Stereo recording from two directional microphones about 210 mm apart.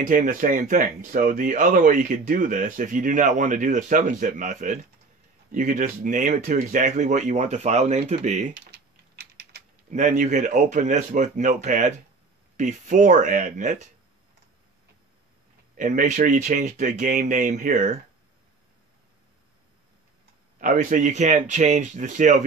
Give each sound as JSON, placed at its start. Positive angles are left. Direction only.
{"t": 0.0, "sound": "speech", "side_deg": -40}
{"t": 8.5, "sound": "typing", "side_deg": -50}
{"t": 9.8, "sound": "speech", "side_deg": -35}
{"t": 15.7, "sound": "speech", "side_deg": -40}
{"t": 20.6, "sound": "speech", "side_deg": -35}